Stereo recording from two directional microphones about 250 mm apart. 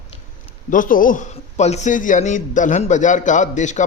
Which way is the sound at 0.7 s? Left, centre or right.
Left.